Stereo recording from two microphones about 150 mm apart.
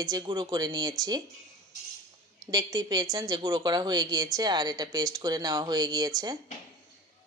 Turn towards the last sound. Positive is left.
turn(degrees=-25)  # may be behind; listen again after turning